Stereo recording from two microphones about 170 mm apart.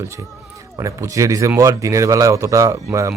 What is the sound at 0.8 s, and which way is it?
Speech, 20° right (ahead or behind).